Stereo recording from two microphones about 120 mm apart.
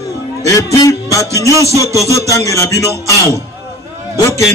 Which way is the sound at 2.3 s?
25° left (ahead or behind).